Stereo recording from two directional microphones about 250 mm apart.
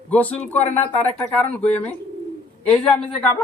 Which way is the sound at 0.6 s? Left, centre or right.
Left.